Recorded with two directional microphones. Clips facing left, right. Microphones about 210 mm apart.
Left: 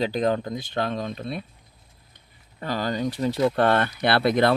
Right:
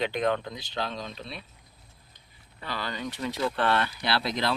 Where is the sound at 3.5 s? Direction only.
45° left (ahead or behind).